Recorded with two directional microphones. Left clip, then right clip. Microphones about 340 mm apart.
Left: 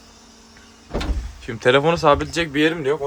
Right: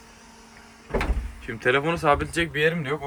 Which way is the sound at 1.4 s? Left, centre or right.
Centre.